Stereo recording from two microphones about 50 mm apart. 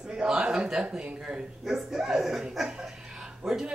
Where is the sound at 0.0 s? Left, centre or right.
Centre.